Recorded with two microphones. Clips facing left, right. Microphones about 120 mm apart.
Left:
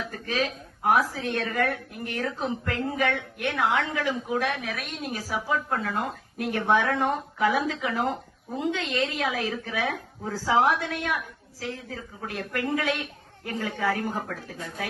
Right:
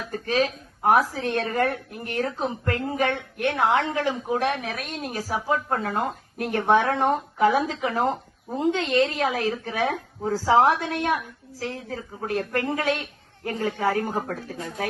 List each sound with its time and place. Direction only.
0.0 s speech: 35° right (ahead or behind)